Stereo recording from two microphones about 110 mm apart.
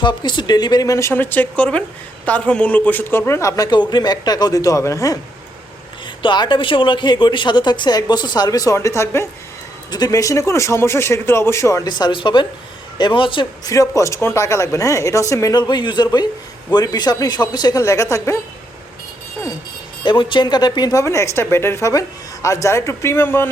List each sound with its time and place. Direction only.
0.0 s a woman's voice: 45° left (ahead or behind)
6.2 s a woman's voice: 45° left (ahead or behind)
13.7 s a woman's voice: 30° left (ahead or behind)
17.8 s speech: 25° left (ahead or behind)
20.1 s a woman's voice: 50° left (ahead or behind); by 23.5 s 20° left (ahead or behind)